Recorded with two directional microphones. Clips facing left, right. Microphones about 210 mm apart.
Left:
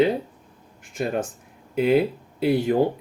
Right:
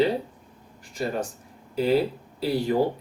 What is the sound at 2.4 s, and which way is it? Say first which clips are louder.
Speech: left 5 dB; 55° left (ahead or behind).